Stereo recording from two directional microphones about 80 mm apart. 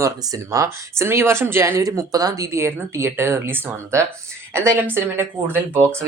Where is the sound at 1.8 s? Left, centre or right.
Right.